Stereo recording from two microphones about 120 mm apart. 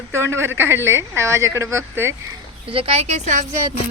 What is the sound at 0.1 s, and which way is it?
Speech, 20° right (ahead or behind).